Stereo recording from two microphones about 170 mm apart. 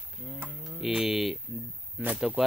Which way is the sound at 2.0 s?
5° right (ahead or behind).